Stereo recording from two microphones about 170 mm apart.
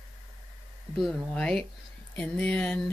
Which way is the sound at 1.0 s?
5° left (ahead or behind).